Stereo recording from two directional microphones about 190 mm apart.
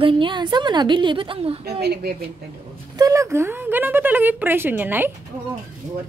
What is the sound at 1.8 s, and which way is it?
Speech, 55° right (ahead or behind).